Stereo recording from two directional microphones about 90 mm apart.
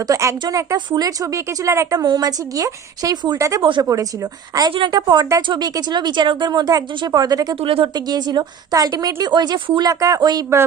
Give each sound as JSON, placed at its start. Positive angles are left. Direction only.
{"t": 0.0, "sound": "speech", "side_deg": -35}
{"t": 2.0, "sound": "speech", "side_deg": -45}
{"t": 3.6, "sound": "speech", "side_deg": -65}
{"t": 3.8, "sound": "speech", "side_deg": -40}
{"t": 7.6, "sound": "speech", "side_deg": -90}
{"t": 7.9, "sound": "speech", "side_deg": -50}